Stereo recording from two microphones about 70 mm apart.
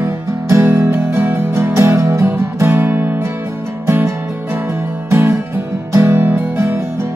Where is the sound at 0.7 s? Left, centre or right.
Right.